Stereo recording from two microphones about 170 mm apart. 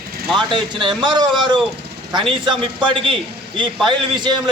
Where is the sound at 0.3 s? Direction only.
25° right (ahead or behind).